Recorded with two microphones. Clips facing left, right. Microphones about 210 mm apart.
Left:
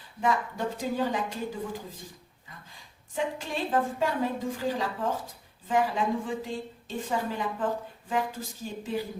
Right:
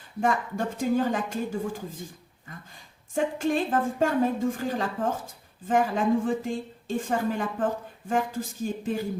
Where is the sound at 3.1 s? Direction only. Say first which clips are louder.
Right 6 dB; 50° right (ahead or behind).